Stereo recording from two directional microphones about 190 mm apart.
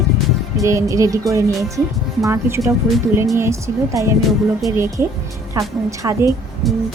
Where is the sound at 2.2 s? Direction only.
15° right (ahead or behind).